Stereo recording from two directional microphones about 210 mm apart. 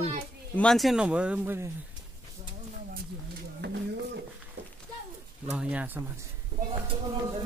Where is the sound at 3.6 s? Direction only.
50° right (ahead or behind).